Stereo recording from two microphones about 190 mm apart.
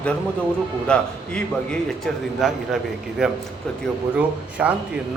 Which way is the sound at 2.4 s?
Centre (ahead or behind).